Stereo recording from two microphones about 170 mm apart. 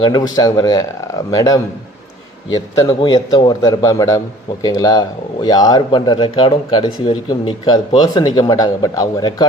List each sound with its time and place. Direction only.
0.0 s speech: 25° left (ahead or behind)